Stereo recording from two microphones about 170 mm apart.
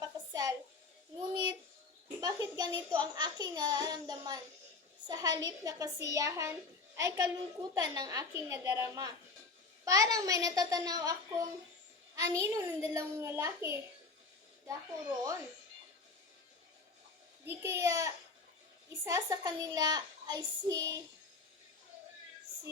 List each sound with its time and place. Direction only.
0.0 s a sound: 20° right (ahead or behind)
2.2 s a child's voice: 20° right (ahead or behind)
17.4 s a child's voice: 15° right (ahead or behind)